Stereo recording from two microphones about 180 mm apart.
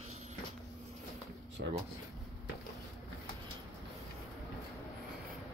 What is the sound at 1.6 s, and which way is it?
Speech, 65° right (ahead or behind).